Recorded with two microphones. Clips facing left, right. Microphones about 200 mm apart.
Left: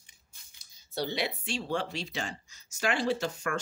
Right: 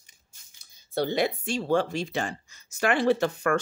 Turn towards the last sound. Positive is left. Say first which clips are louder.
# right 7 dB
turn(degrees=-60)  # may be behind; listen again after turning